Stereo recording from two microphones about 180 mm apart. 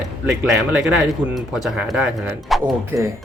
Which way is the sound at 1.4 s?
Centre (ahead or behind).